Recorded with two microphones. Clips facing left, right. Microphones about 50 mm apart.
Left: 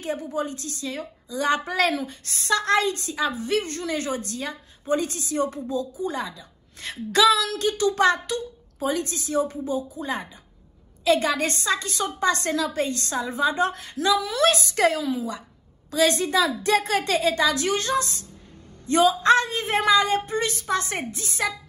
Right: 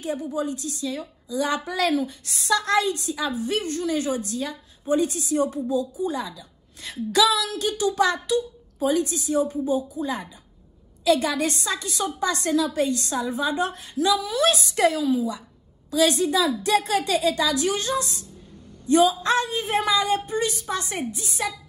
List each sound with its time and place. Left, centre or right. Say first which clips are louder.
0.0 s a woman's voice: right 1 dB; left